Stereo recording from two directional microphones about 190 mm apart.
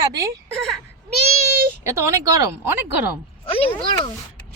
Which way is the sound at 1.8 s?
15° right (ahead or behind).